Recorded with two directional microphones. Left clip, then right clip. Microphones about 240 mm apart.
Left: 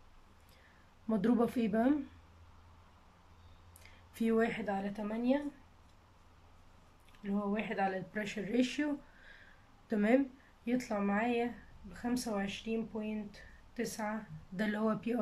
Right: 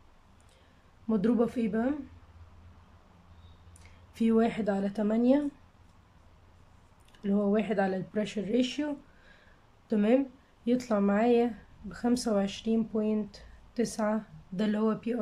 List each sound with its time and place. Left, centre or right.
1.0 s speech: centre
4.1 s speech: centre
7.2 s speech: right
14.6 s speech: centre